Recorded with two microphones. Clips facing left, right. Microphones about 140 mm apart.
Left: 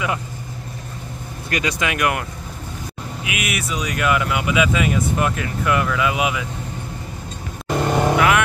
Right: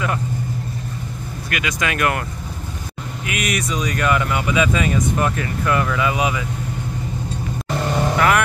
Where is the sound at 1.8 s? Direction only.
15° left (ahead or behind).